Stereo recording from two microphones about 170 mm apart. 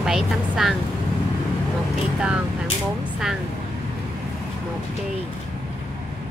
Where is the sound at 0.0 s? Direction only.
Centre (ahead or behind).